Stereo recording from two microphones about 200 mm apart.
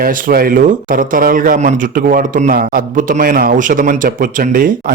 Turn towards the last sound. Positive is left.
turn(degrees=-45)  # may be behind; listen again after turning